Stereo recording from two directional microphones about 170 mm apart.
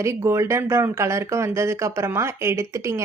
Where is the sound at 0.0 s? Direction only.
15° right (ahead or behind).